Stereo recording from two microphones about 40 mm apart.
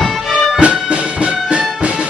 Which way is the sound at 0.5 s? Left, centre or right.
Right.